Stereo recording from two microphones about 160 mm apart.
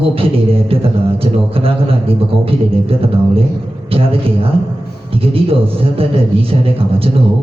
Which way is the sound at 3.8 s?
35° right (ahead or behind).